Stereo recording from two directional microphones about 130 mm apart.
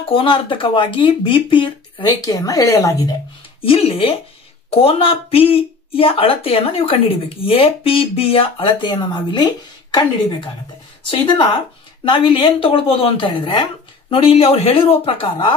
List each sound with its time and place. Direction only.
0.1 s speech: 40° left (ahead or behind); by 3.2 s 25° left (ahead or behind)
3.6 s speech: 45° left (ahead or behind)